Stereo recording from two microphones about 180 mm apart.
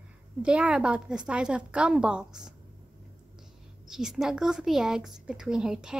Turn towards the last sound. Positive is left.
turn(degrees=-5)  # may be behind; listen again after turning